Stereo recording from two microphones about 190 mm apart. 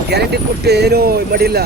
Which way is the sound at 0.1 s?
60° right (ahead or behind).